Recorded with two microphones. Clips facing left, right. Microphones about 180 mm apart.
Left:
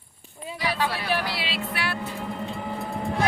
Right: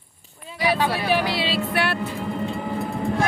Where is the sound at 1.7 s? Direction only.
65° right (ahead or behind).